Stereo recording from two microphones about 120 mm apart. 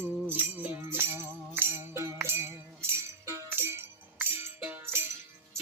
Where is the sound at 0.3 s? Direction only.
15° right (ahead or behind).